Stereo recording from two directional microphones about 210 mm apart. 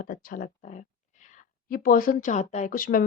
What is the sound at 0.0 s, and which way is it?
Speech, 40° left (ahead or behind).